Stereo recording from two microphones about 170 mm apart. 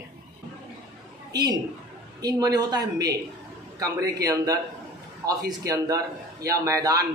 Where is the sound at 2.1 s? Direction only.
20° right (ahead or behind).